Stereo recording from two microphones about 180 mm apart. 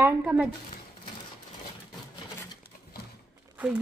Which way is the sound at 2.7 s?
50° left (ahead or behind).